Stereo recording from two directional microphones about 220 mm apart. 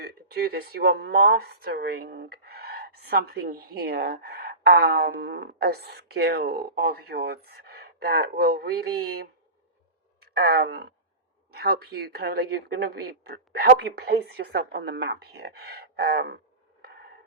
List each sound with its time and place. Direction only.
0.0 s a woman's voice: 45° right (ahead or behind)